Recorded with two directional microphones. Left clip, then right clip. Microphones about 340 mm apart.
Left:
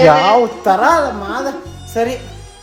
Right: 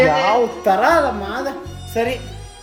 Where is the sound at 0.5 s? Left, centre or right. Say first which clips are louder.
Left 3 dB; centre.